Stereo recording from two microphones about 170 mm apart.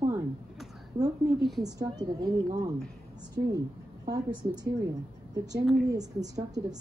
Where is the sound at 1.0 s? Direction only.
20° right (ahead or behind).